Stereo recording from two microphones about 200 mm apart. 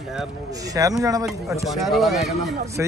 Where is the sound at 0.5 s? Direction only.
15° right (ahead or behind).